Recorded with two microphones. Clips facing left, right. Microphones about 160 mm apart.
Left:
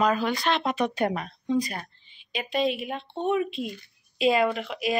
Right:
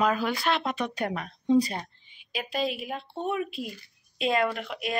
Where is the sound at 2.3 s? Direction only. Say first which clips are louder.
Left 4 dB; centre (ahead or behind).